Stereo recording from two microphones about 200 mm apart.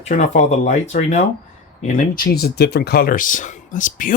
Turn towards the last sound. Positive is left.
turn(degrees=40)  # may be behind; listen again after turning